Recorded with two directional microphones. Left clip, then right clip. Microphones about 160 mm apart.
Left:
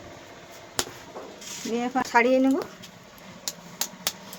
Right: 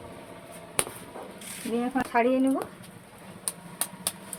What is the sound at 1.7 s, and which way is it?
Speech, 90° left.